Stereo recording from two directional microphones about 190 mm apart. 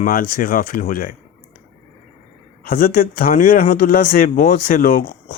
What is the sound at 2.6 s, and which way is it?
Speech, 50° left (ahead or behind).